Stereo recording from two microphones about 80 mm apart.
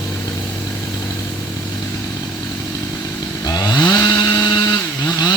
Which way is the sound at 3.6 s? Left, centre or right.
Left.